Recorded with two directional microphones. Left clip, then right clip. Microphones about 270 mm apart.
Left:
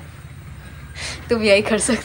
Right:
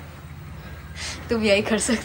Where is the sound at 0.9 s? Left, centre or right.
Centre.